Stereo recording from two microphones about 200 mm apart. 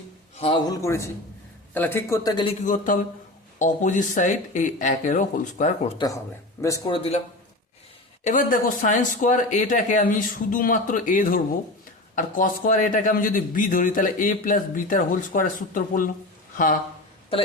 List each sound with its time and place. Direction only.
0.3 s speech: 25° left (ahead or behind)
2.6 s speech: 40° left (ahead or behind)
6.6 s speech: 15° left (ahead or behind)
8.2 s speech: 40° left (ahead or behind)